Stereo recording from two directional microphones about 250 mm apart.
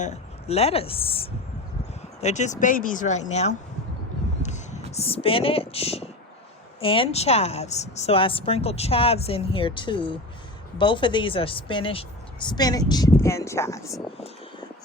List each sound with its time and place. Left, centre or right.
0.0 s a woman's voice: left
4.4 s a sound: left
4.9 s speech: left